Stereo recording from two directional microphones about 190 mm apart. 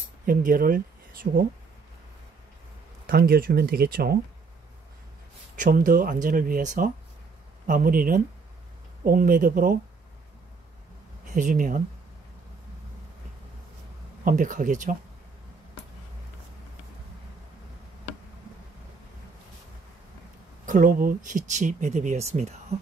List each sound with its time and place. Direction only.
0.3 s speech: 45° right (ahead or behind)
3.1 s speech: 50° right (ahead or behind)
5.6 s speech: 45° right (ahead or behind)
11.2 s speech: 40° right (ahead or behind)
14.2 s speech: 45° right (ahead or behind)
20.6 s speech: 45° right (ahead or behind)